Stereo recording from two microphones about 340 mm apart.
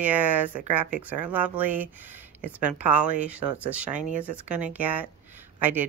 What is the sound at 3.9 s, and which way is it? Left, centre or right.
Speech, right.